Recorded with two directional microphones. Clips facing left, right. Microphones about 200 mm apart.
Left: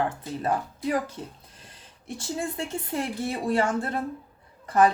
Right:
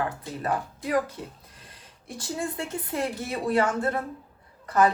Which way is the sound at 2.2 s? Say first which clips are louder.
Even; 25° left (ahead or behind).